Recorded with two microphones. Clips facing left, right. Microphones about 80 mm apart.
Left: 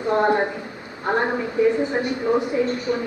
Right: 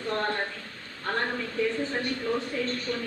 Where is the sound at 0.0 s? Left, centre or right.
Centre.